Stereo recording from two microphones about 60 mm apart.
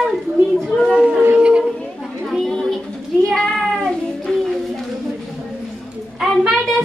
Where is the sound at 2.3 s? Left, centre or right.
Centre.